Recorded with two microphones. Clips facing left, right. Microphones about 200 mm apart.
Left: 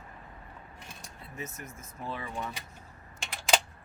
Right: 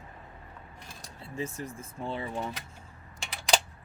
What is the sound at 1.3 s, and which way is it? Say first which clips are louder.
Speech: right 7 dB; 30° right (ahead or behind).